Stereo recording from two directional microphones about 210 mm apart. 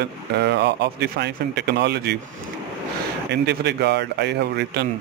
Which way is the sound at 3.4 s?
50° right (ahead or behind).